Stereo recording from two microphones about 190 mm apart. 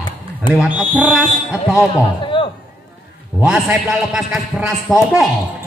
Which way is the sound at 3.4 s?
5° right (ahead or behind).